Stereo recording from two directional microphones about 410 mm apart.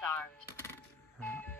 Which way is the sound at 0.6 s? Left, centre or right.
Centre.